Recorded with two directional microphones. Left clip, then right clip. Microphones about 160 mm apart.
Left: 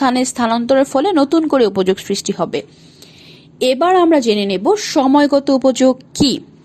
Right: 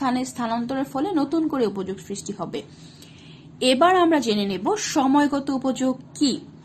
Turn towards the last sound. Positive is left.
turn(degrees=55)  # may be behind; listen again after turning